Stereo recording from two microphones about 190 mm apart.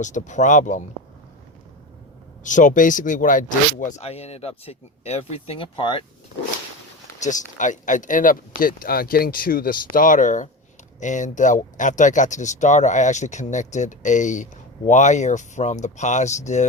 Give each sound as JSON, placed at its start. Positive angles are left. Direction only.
{"t": 0.0, "sound": "speech", "side_deg": 40}
{"t": 2.4, "sound": "speech", "side_deg": 40}
{"t": 7.2, "sound": "speech", "side_deg": 40}